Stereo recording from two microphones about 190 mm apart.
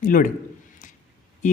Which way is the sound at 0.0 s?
45° left (ahead or behind).